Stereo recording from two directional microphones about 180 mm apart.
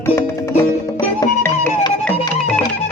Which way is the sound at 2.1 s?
30° left (ahead or behind).